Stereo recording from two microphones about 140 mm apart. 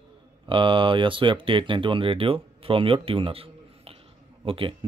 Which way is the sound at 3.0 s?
40° right (ahead or behind).